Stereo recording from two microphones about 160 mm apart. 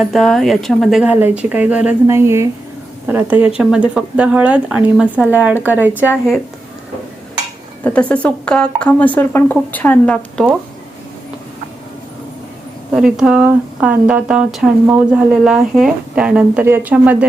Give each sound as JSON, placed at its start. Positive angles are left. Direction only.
{"t": 0.0, "sound": "speech", "side_deg": 0}
{"t": 7.9, "sound": "speech", "side_deg": 10}
{"t": 12.9, "sound": "speech", "side_deg": -5}